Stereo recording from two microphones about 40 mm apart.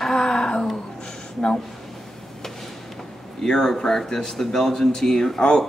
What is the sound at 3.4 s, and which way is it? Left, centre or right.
A man's voice, centre.